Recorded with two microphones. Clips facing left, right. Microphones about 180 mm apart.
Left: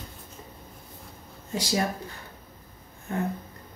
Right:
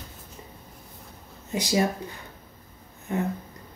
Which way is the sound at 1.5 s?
15° right (ahead or behind).